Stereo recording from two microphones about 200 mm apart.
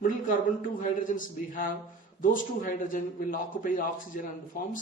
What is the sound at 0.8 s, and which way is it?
A man's voice, 40° left (ahead or behind).